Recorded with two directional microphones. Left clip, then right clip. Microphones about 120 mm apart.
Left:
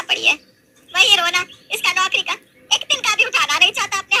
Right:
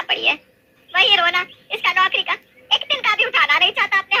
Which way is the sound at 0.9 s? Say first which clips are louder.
Left 1 dB; 15° left (ahead or behind).